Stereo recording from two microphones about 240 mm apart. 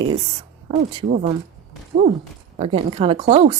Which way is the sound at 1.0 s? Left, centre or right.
Right.